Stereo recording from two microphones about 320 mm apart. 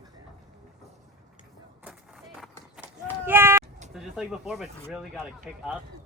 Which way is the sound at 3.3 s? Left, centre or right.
Centre.